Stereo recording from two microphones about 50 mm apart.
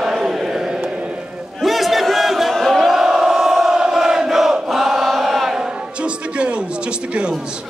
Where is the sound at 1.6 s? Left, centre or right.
Centre.